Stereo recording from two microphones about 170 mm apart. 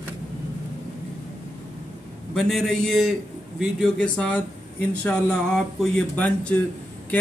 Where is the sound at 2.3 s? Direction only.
5° left (ahead or behind).